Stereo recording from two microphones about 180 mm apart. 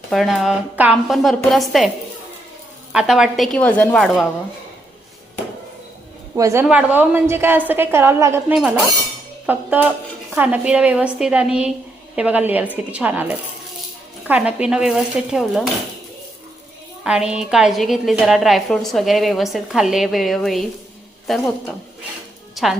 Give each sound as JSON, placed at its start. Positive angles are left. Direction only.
{"t": 0.1, "sound": "a woman's voice", "side_deg": 0}
{"t": 2.9, "sound": "a woman's voice", "side_deg": -5}
{"t": 6.3, "sound": "a woman's voice", "side_deg": -15}
{"t": 17.0, "sound": "a woman's voice", "side_deg": -5}